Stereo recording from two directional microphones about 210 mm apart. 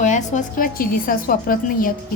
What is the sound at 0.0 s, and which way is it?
A woman's voice, 35° left (ahead or behind).